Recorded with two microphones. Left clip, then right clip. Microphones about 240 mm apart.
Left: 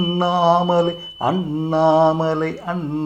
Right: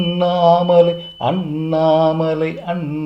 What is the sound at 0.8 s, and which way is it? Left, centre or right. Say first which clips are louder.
Speech: right 6 dB; centre.